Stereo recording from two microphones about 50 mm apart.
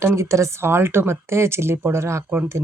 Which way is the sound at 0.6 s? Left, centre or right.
Right.